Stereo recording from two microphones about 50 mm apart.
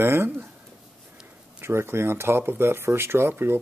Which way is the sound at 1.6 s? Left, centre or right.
Right.